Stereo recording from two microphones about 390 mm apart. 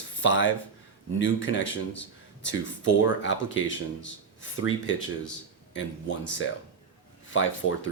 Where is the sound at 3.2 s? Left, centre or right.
Left.